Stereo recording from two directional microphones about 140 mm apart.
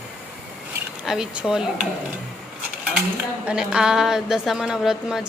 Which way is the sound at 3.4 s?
5° right (ahead or behind).